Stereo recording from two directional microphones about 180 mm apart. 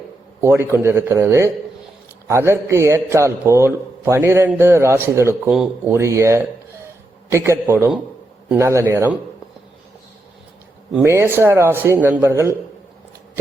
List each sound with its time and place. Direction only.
0.4 s a man's voice: 15° right (ahead or behind)
11.0 s a man's voice: 15° right (ahead or behind)